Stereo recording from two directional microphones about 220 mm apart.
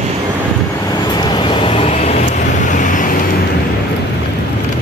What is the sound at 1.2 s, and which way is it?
Vehicle, 20° left (ahead or behind).